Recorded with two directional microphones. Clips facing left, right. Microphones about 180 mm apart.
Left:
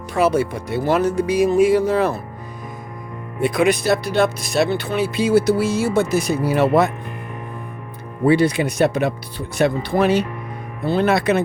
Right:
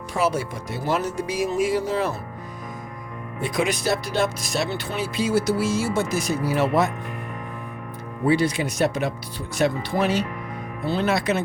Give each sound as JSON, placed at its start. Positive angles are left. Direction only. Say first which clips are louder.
{"t": 0.2, "sound": "speech", "louder": "left 6 dB", "side_deg": 60}
{"t": 3.4, "sound": "speech", "louder": "left 7 dB", "side_deg": 60}
{"t": 8.3, "sound": "speech", "louder": "left 5 dB", "side_deg": 60}